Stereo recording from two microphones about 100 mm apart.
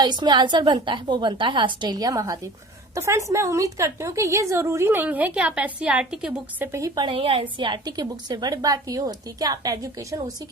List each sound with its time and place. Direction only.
0.0 s a woman's voice: 45° right (ahead or behind); by 6.4 s 5° right (ahead or behind)
6.6 s a woman's voice: 30° right (ahead or behind)
6.9 s a woman's voice: 60° right (ahead or behind)
7.6 s a woman's voice: 50° right (ahead or behind)